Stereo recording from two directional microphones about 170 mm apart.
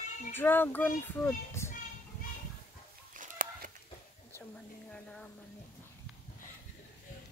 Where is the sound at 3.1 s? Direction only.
50° right (ahead or behind).